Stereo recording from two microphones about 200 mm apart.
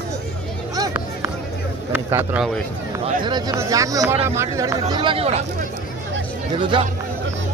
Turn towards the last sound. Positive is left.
turn(degrees=-25)  # may be behind; listen again after turning